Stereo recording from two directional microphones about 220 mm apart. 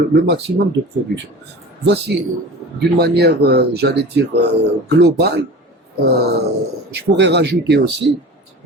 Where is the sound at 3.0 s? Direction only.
45° right (ahead or behind).